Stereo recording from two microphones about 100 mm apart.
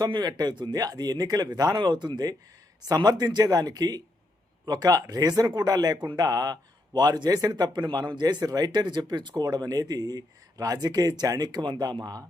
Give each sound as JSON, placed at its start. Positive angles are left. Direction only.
{"t": 0.0, "sound": "speech", "side_deg": -45}